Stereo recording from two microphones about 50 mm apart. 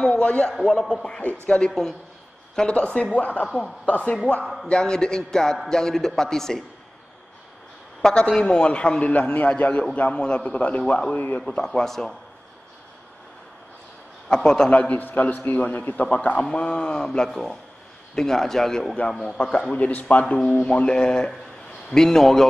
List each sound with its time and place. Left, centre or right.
0.0 s a man's voice: left
0.6 s a man's voice: centre; by 4.2 s left
4.6 s a man's voice: centre
8.0 s a man's voice: centre
11.1 s a man's voice: left
11.4 s a man's voice: left
11.8 s a man's voice: centre
14.3 s a man's voice: centre
14.7 s a man's voice: left; by 18.9 s centre
19.2 s a man's voice: left; by 22.5 s centre